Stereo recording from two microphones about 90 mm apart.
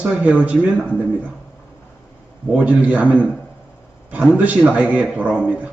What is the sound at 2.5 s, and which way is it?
Speech, 15° right (ahead or behind).